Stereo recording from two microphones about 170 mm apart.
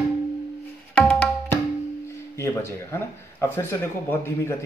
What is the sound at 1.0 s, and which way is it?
Tabla, 5° left (ahead or behind).